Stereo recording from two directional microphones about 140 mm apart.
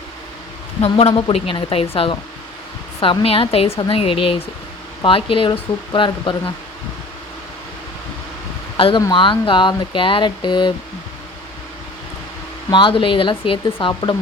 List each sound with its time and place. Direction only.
0.8 s speech: 45° left (ahead or behind)
9.0 s speech: 30° left (ahead or behind)
12.7 s speech: 40° left (ahead or behind)